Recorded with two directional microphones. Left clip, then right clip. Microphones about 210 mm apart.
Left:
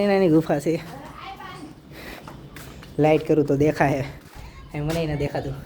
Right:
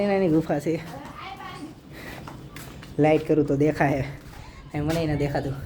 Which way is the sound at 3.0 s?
10° left (ahead or behind).